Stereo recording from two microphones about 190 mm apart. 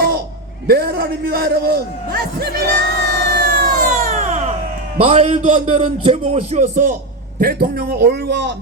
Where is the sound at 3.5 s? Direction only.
55° right (ahead or behind).